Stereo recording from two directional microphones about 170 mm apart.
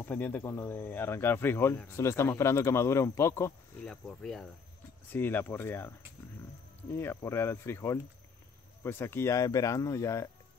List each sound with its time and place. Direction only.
0.0 s speech: 10° left (ahead or behind)
3.8 s speech: 5° left (ahead or behind)
7.0 s speech: 15° left (ahead or behind)